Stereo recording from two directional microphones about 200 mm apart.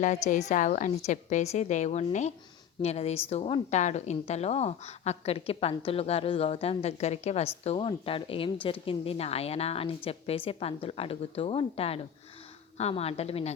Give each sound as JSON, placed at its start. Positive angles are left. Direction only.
{"t": 0.3, "sound": "a woman's voice", "side_deg": 35}